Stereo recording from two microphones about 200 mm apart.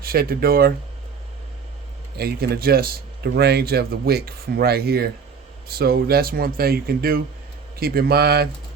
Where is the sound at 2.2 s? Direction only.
50° right (ahead or behind).